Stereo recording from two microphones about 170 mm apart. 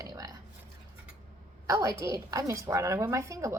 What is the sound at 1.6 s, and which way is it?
Speech, 20° right (ahead or behind).